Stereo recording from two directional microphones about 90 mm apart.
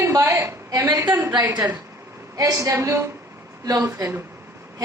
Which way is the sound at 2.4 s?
40° right (ahead or behind).